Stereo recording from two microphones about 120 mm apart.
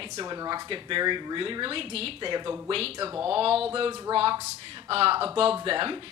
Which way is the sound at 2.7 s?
50° right (ahead or behind).